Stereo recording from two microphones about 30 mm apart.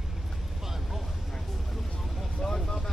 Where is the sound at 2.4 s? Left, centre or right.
Centre.